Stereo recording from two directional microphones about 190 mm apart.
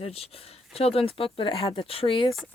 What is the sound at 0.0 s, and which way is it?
Speech, 30° left (ahead or behind).